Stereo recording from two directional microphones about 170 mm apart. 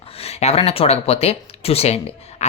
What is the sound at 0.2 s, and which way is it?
Speech, 35° left (ahead or behind).